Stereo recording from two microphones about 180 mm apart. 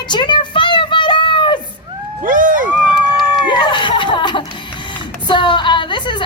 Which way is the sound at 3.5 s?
25° left (ahead or behind).